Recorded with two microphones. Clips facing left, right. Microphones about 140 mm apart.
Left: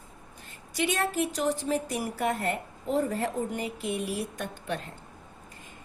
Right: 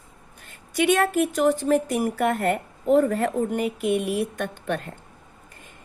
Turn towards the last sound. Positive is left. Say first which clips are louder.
# right 7 dB
turn(degrees=-60)  # may be behind; listen again after turning